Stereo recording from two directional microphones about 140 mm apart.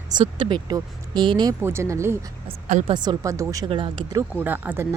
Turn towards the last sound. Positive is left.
turn(degrees=-15)  # may be behind; listen again after turning